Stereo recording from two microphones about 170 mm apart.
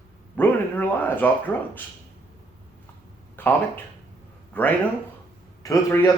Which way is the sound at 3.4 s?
10° left (ahead or behind).